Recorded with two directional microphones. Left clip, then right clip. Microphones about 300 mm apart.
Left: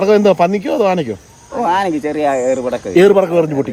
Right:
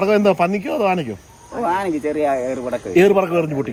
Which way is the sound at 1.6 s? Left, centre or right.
Left.